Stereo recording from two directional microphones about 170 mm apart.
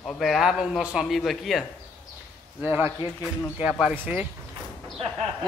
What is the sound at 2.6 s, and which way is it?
Speech, 10° right (ahead or behind).